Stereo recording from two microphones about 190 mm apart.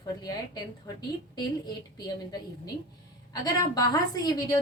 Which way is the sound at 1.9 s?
20° left (ahead or behind).